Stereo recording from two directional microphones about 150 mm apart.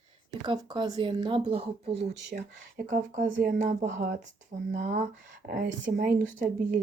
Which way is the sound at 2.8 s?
55° right (ahead or behind).